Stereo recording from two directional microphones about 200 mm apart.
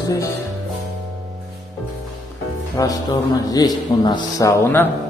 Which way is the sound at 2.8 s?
15° left (ahead or behind).